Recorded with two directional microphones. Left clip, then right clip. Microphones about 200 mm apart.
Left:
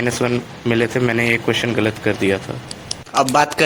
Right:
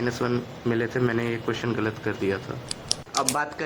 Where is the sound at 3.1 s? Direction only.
40° left (ahead or behind).